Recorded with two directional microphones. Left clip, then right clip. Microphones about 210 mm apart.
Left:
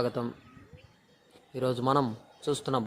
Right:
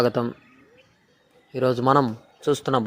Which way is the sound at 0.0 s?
30° right (ahead or behind).